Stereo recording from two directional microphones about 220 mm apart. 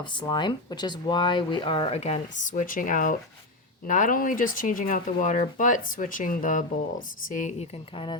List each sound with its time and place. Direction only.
0.0 s speech: 20° left (ahead or behind)